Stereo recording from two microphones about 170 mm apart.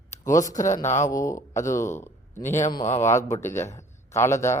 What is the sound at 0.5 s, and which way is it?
Speech, 45° left (ahead or behind).